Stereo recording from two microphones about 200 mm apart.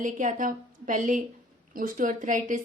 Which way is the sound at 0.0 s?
40° right (ahead or behind).